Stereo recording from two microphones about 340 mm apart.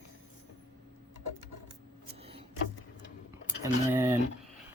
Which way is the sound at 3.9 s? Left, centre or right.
Centre.